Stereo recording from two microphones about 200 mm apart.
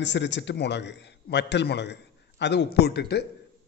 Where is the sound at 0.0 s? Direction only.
60° left (ahead or behind).